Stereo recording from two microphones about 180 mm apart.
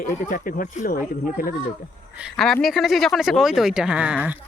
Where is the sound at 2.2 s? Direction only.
Centre (ahead or behind).